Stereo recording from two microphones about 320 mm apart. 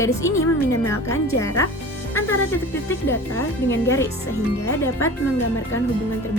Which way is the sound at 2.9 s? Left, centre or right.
Centre.